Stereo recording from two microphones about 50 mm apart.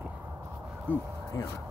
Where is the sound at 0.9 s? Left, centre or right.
Left.